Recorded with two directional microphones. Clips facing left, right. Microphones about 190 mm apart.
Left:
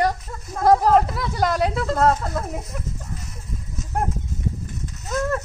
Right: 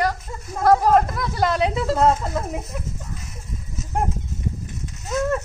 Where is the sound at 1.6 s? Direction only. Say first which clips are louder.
Right 1 dB; 5° right (ahead or behind).